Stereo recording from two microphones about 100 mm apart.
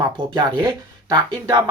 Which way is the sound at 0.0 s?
55° right (ahead or behind).